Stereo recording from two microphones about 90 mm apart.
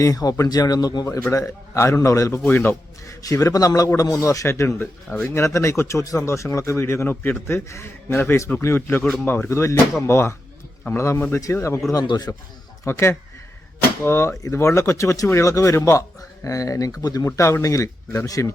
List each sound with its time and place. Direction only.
0.0 s speech: 40° left (ahead or behind)
2.4 s a man's voice: 20° left (ahead or behind)
3.1 s a man's voice: 40° left (ahead or behind)
12.0 s speech: 50° left (ahead or behind)
12.8 s a man's voice: 30° left (ahead or behind)